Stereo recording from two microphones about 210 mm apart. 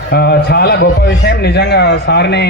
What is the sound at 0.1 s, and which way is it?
Speech, 50° left (ahead or behind).